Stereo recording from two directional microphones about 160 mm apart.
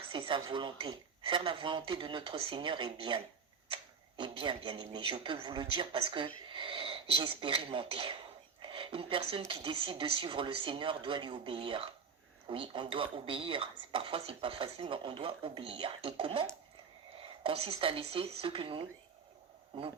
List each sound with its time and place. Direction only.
0.1 s a man's voice: 30° right (ahead or behind)
4.2 s a man's voice: 30° right (ahead or behind)
8.6 s a sound: 35° right (ahead or behind)
9.5 s a man's voice: 35° right (ahead or behind)